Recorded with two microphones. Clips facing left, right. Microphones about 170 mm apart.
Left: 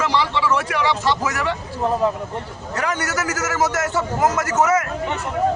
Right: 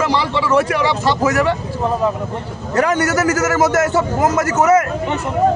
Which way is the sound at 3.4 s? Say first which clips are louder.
Right 4 dB; 65° right (ahead or behind).